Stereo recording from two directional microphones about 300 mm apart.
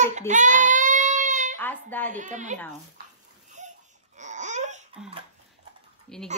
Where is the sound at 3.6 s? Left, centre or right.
Right.